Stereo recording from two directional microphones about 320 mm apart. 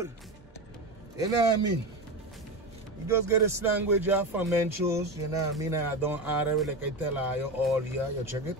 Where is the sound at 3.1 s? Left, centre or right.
Centre.